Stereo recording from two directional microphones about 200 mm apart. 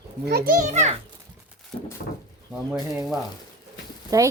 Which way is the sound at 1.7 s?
30° left (ahead or behind).